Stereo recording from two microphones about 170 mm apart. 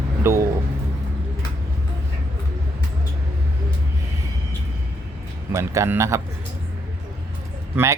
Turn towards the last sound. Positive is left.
turn(degrees=-15)  # may be behind; listen again after turning